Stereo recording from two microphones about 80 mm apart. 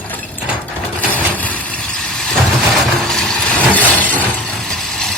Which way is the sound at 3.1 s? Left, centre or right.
Centre.